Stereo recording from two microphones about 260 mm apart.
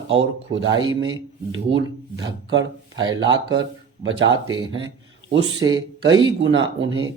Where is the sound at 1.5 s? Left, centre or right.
Right.